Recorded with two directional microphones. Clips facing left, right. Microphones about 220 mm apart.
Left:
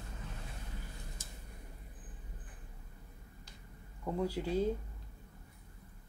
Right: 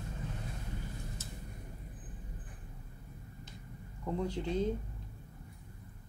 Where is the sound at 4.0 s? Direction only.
10° left (ahead or behind).